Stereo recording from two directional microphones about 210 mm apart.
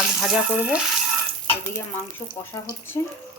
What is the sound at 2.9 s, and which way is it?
Speech, 15° left (ahead or behind).